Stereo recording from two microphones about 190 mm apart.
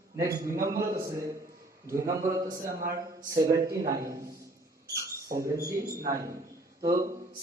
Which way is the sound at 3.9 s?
15° right (ahead or behind).